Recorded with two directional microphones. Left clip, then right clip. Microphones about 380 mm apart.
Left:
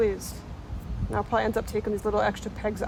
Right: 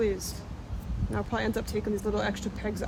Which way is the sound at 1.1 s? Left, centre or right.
Centre.